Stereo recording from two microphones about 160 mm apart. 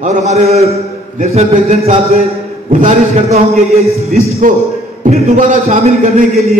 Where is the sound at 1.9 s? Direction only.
40° right (ahead or behind).